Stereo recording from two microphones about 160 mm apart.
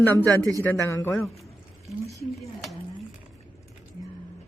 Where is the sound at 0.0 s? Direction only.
10° left (ahead or behind).